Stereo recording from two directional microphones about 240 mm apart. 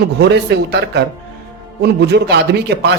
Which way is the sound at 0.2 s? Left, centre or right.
Right.